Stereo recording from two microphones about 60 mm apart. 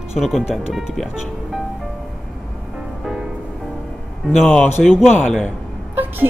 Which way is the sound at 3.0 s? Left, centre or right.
Centre.